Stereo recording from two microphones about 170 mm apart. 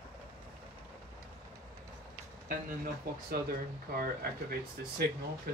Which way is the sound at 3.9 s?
60° right (ahead or behind).